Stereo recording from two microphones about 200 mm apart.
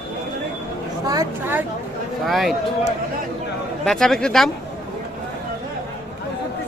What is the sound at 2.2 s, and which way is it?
Speech, centre (ahead or behind).